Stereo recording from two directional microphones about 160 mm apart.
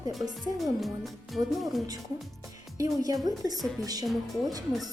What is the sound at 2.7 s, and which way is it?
Speech, 20° right (ahead or behind).